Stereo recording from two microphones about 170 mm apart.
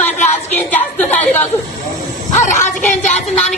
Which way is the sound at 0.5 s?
10° left (ahead or behind).